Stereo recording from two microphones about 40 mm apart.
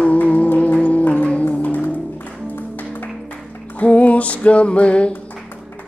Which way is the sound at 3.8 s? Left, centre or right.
Left.